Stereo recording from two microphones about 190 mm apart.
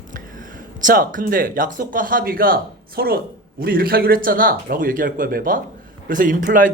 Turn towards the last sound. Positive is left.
turn(degrees=-45)  # may be behind; listen again after turning